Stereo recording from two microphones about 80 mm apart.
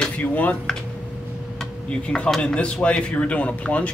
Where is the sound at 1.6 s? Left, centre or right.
Centre.